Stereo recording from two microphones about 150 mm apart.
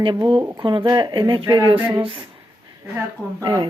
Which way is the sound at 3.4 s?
25° right (ahead or behind).